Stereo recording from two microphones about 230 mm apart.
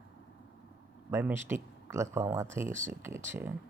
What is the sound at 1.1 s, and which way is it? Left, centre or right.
Speech, centre.